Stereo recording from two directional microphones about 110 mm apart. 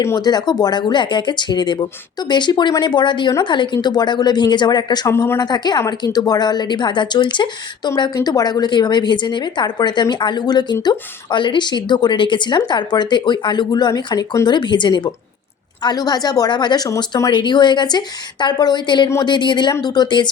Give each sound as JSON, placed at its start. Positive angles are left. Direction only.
{"t": 0.2, "sound": "speech", "side_deg": 40}
{"t": 5.1, "sound": "speech", "side_deg": 25}
{"t": 5.4, "sound": "speech", "side_deg": 40}